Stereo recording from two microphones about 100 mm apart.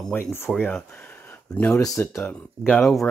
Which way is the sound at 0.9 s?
15° left (ahead or behind).